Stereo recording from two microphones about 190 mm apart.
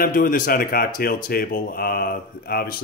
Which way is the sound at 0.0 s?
50° left (ahead or behind).